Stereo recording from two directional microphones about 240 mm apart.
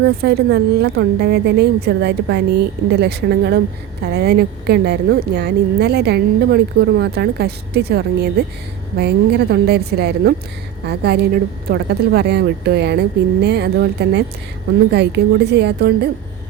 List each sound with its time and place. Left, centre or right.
0.2 s a woman's voice: right